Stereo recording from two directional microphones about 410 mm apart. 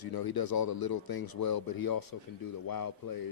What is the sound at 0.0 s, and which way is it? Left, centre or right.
Speech, left.